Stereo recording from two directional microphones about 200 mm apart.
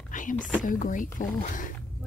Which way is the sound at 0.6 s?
40° left (ahead or behind).